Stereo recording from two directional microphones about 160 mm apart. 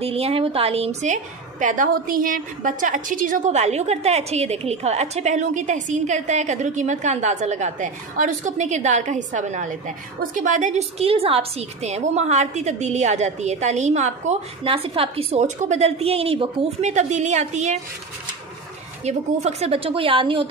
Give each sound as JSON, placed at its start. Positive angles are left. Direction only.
{"t": 0.0, "sound": "a woman's voice", "side_deg": -35}
{"t": 19.0, "sound": "a woman's voice", "side_deg": -40}